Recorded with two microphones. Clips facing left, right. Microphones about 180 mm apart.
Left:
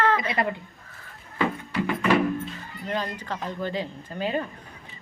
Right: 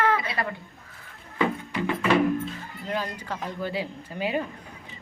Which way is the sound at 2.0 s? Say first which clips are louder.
Right 1 dB; centre (ahead or behind).